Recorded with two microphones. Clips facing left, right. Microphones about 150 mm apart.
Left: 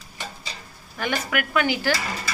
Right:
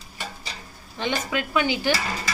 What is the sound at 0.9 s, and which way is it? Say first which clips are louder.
A woman's voice: even; 20° right (ahead or behind).